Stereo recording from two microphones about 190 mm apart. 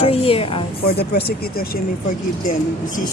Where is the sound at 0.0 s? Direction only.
30° left (ahead or behind).